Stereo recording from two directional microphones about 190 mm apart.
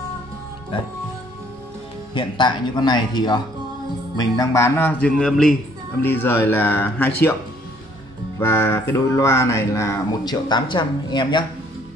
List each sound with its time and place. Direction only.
0.7 s speech: 25° left (ahead or behind)
2.1 s speech: 25° left (ahead or behind)
8.4 s speech: 10° left (ahead or behind)